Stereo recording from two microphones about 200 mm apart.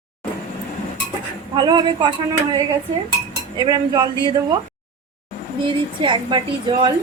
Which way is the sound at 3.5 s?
20° right (ahead or behind).